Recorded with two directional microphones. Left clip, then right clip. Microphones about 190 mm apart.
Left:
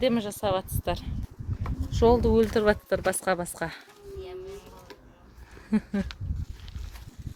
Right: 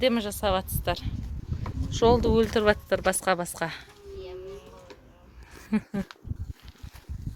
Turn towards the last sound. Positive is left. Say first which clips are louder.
# left 1 dB
turn(degrees=5)  # may be behind; listen again after turning